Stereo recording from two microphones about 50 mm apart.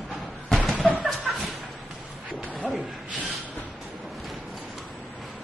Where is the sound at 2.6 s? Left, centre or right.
Centre.